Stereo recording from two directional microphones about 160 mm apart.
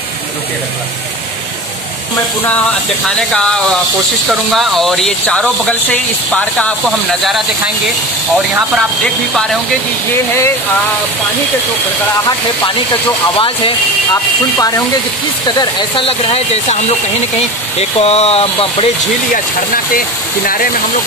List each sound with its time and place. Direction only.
3.2 s speech: 5° left (ahead or behind)
9.0 s speech: 5° left (ahead or behind)
15.4 s speech: 25° left (ahead or behind)
16.1 s speech: 40° left (ahead or behind)
17.7 s speech: 40° left (ahead or behind)